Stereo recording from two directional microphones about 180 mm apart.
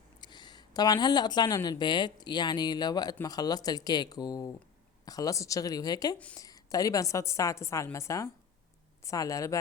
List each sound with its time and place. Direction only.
0.2 s a woman's voice: 25° left (ahead or behind)